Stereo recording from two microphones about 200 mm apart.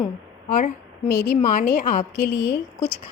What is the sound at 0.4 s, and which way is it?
A woman's voice, 40° left (ahead or behind).